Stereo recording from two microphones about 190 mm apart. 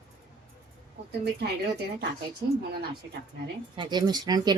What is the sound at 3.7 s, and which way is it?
Speech, 20° right (ahead or behind).